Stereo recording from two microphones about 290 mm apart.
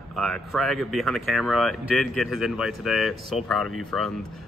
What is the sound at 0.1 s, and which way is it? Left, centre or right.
Speech, centre.